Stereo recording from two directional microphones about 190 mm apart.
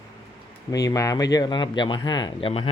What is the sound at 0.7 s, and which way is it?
Speech, 20° left (ahead or behind).